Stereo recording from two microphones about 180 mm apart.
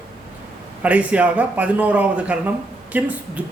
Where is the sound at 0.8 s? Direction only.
5° right (ahead or behind).